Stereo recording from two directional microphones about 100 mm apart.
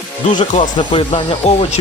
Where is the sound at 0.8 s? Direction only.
60° left (ahead or behind); by 1.6 s 80° left.